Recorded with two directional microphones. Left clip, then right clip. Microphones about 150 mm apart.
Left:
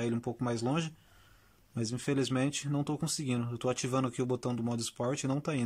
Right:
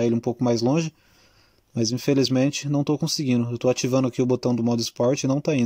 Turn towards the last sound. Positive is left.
turn(degrees=-30)  # may be behind; listen again after turning